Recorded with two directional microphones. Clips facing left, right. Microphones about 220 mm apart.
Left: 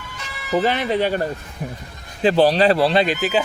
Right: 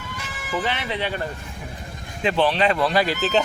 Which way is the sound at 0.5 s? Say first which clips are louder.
Left 7 dB; 45° left (ahead or behind).